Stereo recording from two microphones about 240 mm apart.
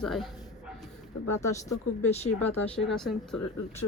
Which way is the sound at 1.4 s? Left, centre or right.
Centre.